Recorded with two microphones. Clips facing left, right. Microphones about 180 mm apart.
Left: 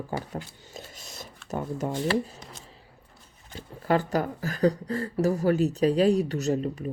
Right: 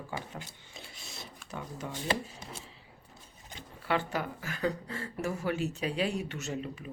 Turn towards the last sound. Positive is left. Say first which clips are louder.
# left 10 dB
turn(degrees=40)  # may be behind; listen again after turning